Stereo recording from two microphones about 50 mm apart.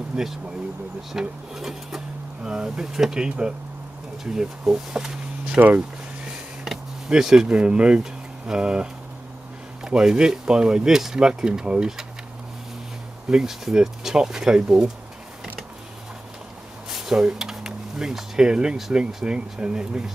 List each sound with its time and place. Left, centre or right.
0.1 s speech: centre
7.1 s speech: centre
9.8 s speech: centre
13.3 s speech: centre
16.9 s speech: centre